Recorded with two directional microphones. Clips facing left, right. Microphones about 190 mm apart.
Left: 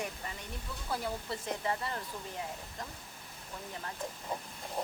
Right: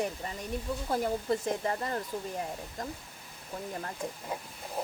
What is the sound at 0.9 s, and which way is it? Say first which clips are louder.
Speech: right 7 dB; 45° right (ahead or behind).